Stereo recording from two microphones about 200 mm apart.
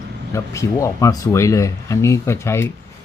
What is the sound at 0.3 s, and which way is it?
Speech, 15° left (ahead or behind).